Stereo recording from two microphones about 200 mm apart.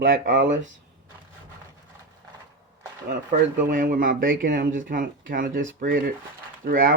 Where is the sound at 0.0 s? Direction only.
55° right (ahead or behind).